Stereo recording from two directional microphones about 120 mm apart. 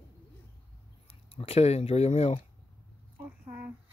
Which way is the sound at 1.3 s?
55° left (ahead or behind).